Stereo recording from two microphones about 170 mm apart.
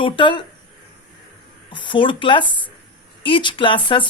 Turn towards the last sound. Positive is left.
turn(degrees=30)  # may be behind; listen again after turning